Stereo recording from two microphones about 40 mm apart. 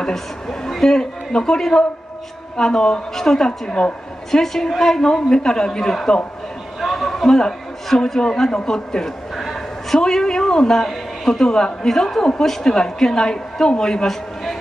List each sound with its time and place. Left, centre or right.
0.0 s a woman's voice: centre
4.3 s a woman's voice: centre
6.8 s a sound: centre
8.2 s a man's voice: centre
10.8 s a sound: centre
11.4 s a woman's voice: centre